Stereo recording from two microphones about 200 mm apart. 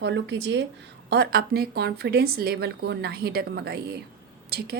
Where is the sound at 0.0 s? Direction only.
60° right (ahead or behind).